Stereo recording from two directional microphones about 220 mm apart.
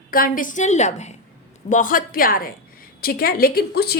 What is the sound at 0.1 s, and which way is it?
A woman's voice, 40° left (ahead or behind).